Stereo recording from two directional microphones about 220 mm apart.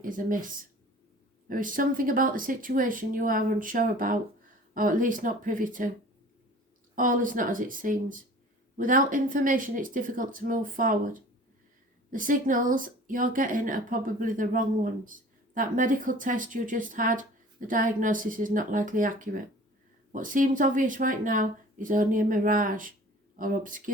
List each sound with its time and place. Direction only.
0.0 s speech: 40° right (ahead or behind)
6.9 s speech: 35° right (ahead or behind)